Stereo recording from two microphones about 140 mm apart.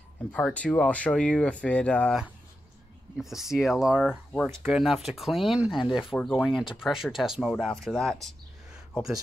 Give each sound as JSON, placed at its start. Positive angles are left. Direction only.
{"t": 0.3, "sound": "speech", "side_deg": 10}
{"t": 3.2, "sound": "speech", "side_deg": 0}
{"t": 4.3, "sound": "speech", "side_deg": 10}
{"t": 4.6, "sound": "speech", "side_deg": 0}
{"t": 6.1, "sound": "speech", "side_deg": 15}
{"t": 6.8, "sound": "speech", "side_deg": -5}